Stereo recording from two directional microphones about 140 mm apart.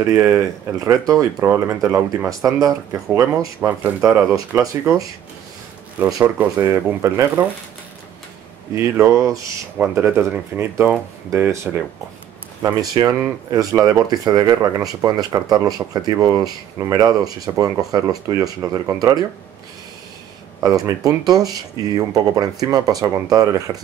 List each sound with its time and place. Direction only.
0.0 s speech: 20° right (ahead or behind)
6.2 s speech: 15° right (ahead or behind)
8.7 s speech: 15° right (ahead or behind)
20.6 s speech: 25° right (ahead or behind)